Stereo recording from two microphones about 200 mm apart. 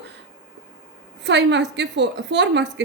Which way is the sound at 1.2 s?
60° right (ahead or behind).